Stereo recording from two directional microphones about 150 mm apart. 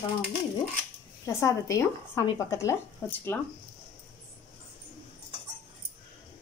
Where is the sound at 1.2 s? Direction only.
20° left (ahead or behind).